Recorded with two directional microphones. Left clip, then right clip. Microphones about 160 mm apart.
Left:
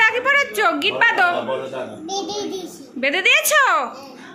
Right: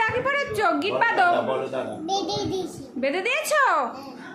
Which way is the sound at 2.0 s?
5° right (ahead or behind).